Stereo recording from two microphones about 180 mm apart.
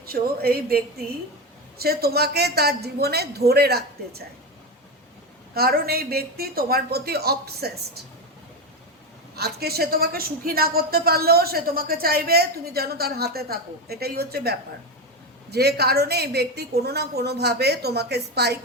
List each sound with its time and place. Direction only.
0.0 s a woman's voice: 55° right (ahead or behind)
5.5 s a woman's voice: 60° right (ahead or behind)
9.3 s a woman's voice: 60° right (ahead or behind)